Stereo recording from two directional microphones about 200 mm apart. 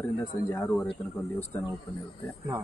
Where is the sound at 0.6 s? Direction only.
Centre (ahead or behind).